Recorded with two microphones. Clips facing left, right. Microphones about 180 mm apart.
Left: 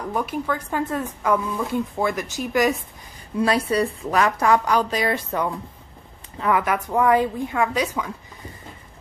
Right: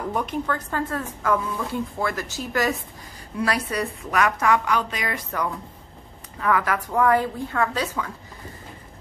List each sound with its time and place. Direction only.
0.1 s a woman's voice: 5° left (ahead or behind)
3.3 s a woman's voice: 25° left (ahead or behind)